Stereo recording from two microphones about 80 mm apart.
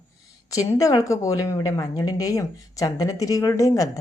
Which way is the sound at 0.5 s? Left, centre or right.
Left.